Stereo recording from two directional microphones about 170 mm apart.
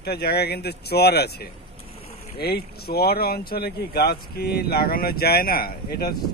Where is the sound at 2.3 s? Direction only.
70° left (ahead or behind).